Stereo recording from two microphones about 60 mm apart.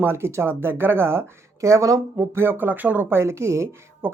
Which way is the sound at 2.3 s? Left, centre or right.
Right.